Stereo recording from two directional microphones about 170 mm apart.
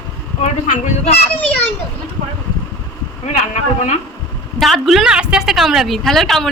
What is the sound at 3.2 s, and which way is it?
Speech, 40° left (ahead or behind).